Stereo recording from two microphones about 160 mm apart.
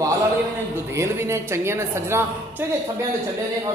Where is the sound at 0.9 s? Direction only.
15° right (ahead or behind).